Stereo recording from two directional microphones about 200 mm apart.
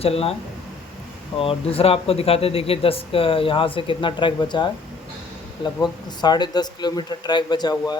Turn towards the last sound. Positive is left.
turn(degrees=20)  # may be behind; listen again after turning